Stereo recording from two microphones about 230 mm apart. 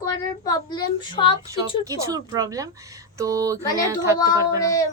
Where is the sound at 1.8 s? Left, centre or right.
Centre.